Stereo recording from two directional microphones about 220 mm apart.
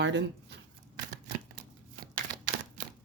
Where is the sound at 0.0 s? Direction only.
50° right (ahead or behind).